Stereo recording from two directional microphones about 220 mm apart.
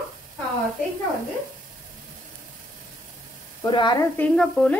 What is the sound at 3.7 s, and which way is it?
Speech, 20° left (ahead or behind).